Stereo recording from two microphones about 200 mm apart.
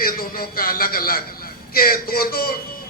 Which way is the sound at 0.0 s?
45° left (ahead or behind).